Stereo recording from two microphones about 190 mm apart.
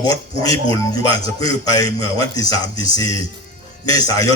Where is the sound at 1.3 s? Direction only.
20° left (ahead or behind).